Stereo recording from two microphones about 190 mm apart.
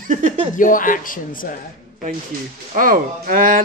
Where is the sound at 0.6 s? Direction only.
45° left (ahead or behind).